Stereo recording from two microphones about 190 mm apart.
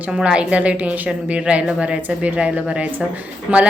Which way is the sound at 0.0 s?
5° right (ahead or behind).